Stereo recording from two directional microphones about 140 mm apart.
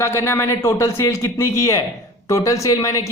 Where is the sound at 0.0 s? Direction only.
20° left (ahead or behind).